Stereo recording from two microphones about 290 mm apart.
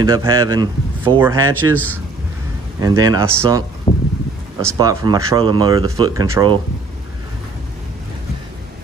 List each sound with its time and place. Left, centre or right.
0.0 s speech: centre
3.9 s a sound: centre
4.6 s speech: centre